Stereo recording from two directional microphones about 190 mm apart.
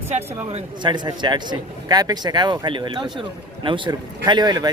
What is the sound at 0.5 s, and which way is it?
Speech, 25° right (ahead or behind).